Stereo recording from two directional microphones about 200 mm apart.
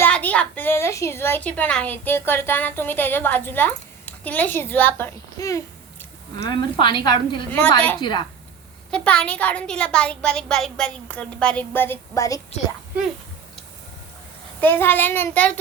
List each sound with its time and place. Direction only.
0.0 s a woman's voice: 10° left (ahead or behind)
8.9 s a woman's voice: 5° left (ahead or behind)
14.6 s a woman's voice: 10° left (ahead or behind)